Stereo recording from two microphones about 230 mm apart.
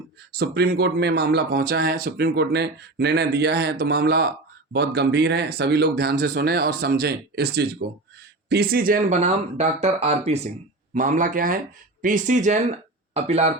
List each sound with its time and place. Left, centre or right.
0.3 s speech: right